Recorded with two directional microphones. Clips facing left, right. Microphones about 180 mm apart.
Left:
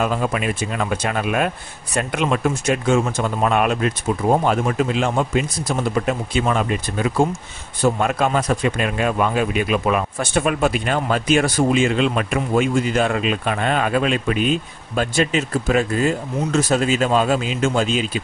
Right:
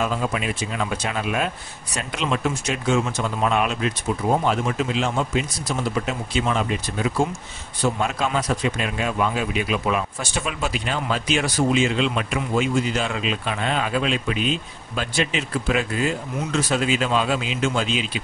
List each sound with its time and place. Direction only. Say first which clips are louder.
0.0 s speech: left 3 dB; 55° left (ahead or behind)